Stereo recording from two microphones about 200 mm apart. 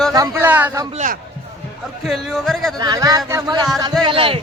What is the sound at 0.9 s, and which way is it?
Speech, 40° right (ahead or behind).